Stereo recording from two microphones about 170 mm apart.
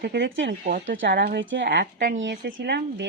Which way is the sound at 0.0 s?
65° right (ahead or behind).